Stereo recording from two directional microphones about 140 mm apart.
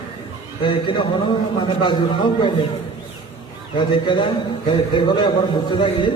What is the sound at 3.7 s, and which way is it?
A man's voice, 35° left (ahead or behind).